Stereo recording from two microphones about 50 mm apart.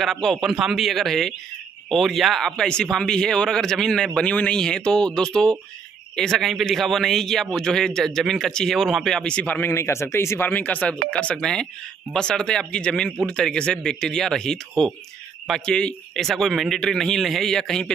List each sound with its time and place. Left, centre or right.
0.0 s speech: centre
2.5 s speech: centre
8.0 s speech: centre
8.8 s speech: centre
9.2 s speech: left
9.7 s speech: left
10.4 s speech: left
12.1 s speech: centre
16.2 s speech: centre